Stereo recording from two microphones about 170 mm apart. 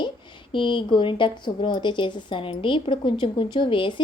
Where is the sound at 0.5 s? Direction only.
30° left (ahead or behind).